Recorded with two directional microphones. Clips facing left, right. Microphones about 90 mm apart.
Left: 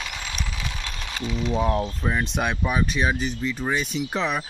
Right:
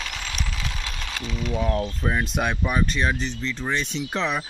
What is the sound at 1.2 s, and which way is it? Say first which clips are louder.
Speech: left 3 dB; 15° left (ahead or behind).